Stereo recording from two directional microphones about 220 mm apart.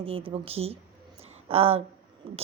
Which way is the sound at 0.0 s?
25° right (ahead or behind).